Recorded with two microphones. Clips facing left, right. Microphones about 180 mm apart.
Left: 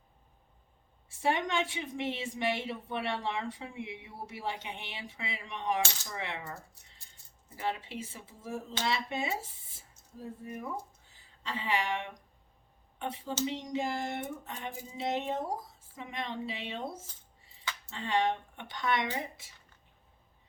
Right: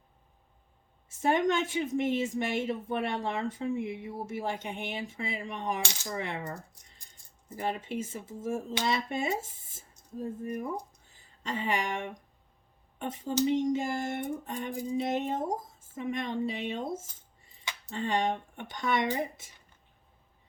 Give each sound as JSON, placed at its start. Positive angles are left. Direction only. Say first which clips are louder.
{"t": 1.0, "sound": "speech", "louder": "right 5 dB", "side_deg": -45}